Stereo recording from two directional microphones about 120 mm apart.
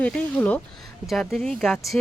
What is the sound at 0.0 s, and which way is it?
Speech, 10° left (ahead or behind).